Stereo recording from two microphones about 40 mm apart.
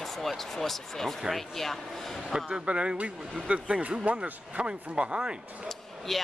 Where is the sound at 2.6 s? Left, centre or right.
Right.